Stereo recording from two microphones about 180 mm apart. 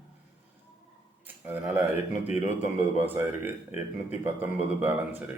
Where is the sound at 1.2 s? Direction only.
10° right (ahead or behind).